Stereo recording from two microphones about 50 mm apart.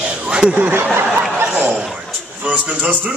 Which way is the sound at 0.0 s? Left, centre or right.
Right.